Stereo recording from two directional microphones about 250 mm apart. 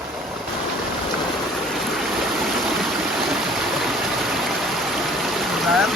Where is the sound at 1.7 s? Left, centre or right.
Centre.